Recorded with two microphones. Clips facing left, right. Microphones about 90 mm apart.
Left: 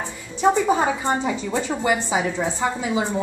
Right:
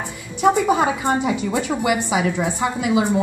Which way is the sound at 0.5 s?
15° right (ahead or behind).